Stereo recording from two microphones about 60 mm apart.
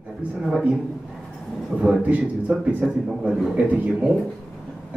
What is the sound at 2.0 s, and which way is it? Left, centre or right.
Speech, right.